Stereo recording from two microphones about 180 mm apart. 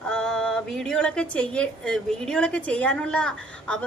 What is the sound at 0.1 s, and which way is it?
A woman's voice, 5° left (ahead or behind).